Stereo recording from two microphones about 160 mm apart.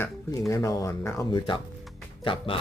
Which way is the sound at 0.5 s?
20° left (ahead or behind).